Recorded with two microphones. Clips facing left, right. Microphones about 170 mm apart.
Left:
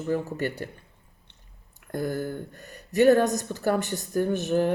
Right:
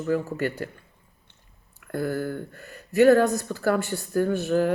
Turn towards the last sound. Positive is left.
turn(degrees=20)  # may be behind; listen again after turning